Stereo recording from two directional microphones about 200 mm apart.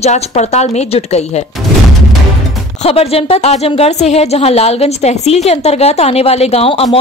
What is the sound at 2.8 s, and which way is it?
A woman's voice, 30° left (ahead or behind).